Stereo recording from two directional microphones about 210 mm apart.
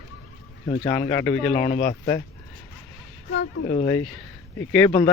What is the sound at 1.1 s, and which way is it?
Speech, 10° left (ahead or behind).